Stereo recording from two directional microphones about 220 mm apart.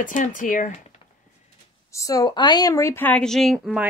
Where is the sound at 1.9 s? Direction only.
15° left (ahead or behind).